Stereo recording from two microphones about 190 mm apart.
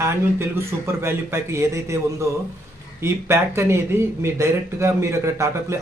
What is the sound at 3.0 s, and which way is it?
Speech, 15° right (ahead or behind).